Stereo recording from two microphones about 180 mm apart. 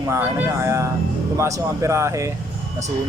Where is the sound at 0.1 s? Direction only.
10° right (ahead or behind).